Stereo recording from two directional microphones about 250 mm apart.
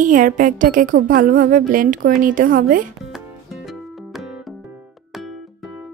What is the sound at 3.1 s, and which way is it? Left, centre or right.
Music, centre.